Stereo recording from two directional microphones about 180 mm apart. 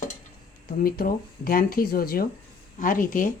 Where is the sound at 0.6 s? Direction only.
55° left (ahead or behind).